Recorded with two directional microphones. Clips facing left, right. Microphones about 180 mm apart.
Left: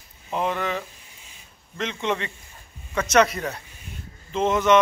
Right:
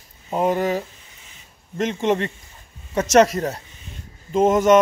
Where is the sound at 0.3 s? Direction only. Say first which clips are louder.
Right 6 dB; 40° right (ahead or behind).